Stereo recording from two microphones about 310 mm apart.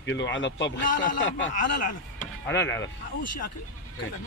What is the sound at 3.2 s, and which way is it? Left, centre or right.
Speech, left.